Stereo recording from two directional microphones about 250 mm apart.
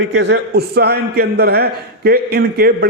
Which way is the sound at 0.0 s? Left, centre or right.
Right.